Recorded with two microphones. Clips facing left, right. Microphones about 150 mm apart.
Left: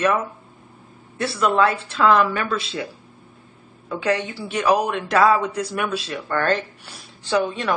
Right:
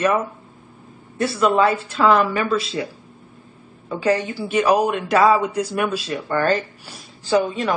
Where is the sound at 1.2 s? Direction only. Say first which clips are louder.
Right 2 dB; centre (ahead or behind).